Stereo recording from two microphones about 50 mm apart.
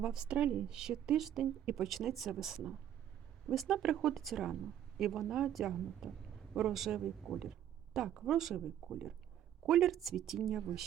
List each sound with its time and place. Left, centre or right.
0.0 s speech: centre
0.3 s speech: right
0.7 s a woman's voice: centre
9.6 s a woman's voice: centre